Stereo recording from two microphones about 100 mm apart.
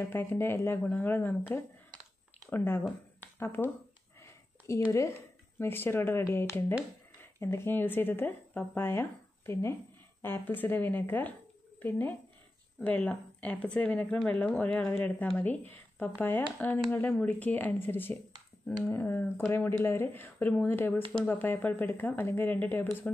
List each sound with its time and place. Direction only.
0.1 s speech: 20° left (ahead or behind)
2.5 s speech: 25° left (ahead or behind)
3.2 s a sound: 25° left (ahead or behind)
5.6 s speech: 25° left (ahead or behind)